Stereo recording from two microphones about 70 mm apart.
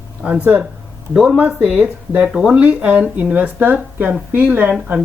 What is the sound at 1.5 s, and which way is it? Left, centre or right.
Speech, centre.